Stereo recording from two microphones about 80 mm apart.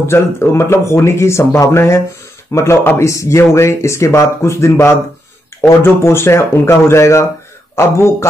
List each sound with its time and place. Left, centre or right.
0.0 s speech: left